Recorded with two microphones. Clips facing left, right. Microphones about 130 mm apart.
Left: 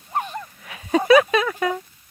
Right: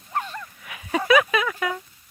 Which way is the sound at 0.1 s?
20° left (ahead or behind).